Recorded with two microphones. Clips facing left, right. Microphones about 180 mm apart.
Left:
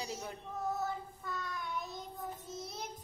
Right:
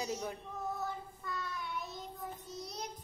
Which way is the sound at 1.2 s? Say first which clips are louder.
Right 3 dB; centre (ahead or behind).